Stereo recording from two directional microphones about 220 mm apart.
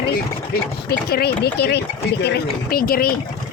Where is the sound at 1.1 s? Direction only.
45° left (ahead or behind).